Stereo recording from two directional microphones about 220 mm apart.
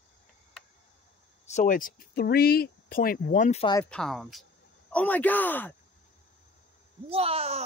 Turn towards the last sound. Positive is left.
turn(degrees=-25)  # may be behind; listen again after turning